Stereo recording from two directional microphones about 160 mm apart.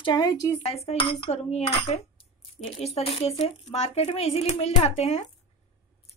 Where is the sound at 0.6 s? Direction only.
40° left (ahead or behind).